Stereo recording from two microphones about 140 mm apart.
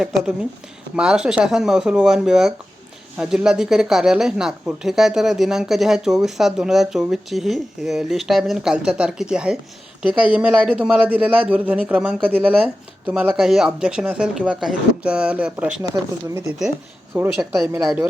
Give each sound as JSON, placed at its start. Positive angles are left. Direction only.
{"t": 0.0, "sound": "speech", "side_deg": -5}
{"t": 17.2, "sound": "a woman's voice", "side_deg": -20}